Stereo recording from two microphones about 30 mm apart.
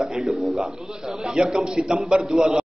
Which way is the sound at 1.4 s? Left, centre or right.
Right.